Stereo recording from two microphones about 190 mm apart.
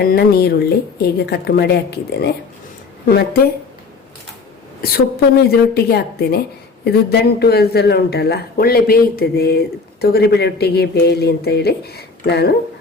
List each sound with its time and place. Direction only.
0.0 s speech: 55° left (ahead or behind)
4.8 s speech: 50° left (ahead or behind)